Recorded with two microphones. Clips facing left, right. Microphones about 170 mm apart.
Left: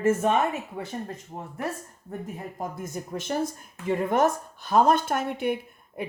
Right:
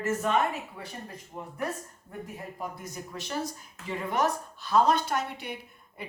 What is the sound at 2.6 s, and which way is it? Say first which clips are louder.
Speech: left 5 dB; 50° left (ahead or behind).